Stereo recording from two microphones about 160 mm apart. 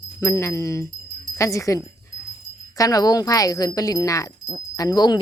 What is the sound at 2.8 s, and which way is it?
Speech, 20° left (ahead or behind).